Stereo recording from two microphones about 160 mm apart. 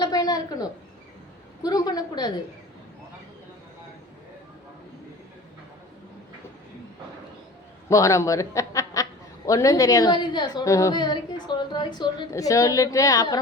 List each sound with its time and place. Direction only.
0.0 s a sound: 25° left (ahead or behind)
1.6 s a woman's voice: 25° left (ahead or behind)
7.9 s a man's voice: 20° left (ahead or behind)